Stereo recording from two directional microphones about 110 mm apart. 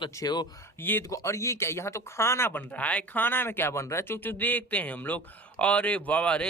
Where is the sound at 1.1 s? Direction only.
30° left (ahead or behind).